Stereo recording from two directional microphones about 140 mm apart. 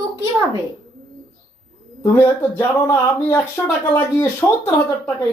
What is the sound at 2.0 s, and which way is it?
Speech, 20° left (ahead or behind).